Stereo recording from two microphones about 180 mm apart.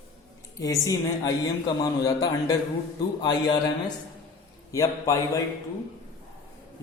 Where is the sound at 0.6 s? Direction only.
20° left (ahead or behind).